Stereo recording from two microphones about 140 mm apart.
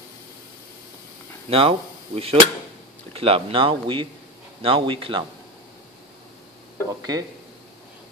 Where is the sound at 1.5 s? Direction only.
40° right (ahead or behind).